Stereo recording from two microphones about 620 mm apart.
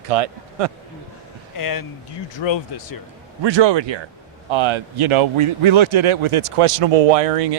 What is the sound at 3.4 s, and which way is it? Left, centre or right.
A man's voice, right.